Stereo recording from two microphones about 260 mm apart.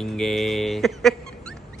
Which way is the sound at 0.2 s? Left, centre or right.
Centre.